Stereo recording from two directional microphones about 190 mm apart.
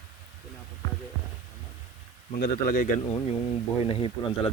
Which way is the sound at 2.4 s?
45° left (ahead or behind).